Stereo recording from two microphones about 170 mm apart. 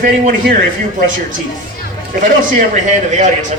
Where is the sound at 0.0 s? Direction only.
50° right (ahead or behind).